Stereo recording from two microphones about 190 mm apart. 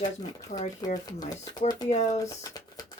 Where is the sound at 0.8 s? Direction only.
20° left (ahead or behind).